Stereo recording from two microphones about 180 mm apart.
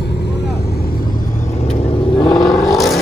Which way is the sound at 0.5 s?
60° left (ahead or behind).